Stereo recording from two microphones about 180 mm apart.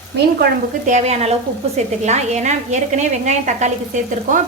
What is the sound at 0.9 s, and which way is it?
A woman's voice, 40° right (ahead or behind).